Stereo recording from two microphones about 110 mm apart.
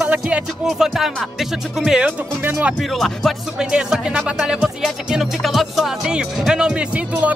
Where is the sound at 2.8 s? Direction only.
Centre (ahead or behind).